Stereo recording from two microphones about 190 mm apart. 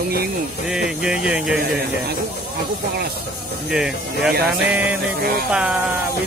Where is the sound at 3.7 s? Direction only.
5° right (ahead or behind).